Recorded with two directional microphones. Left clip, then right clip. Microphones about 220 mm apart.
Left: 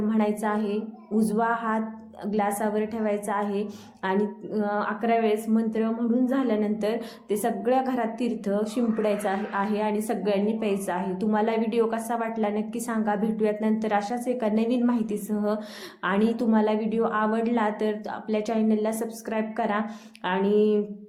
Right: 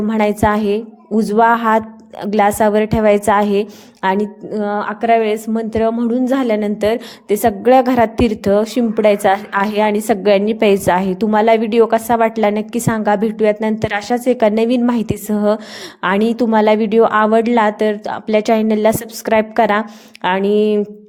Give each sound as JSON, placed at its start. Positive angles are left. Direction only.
{"t": 0.1, "sound": "a woman's voice", "side_deg": -40}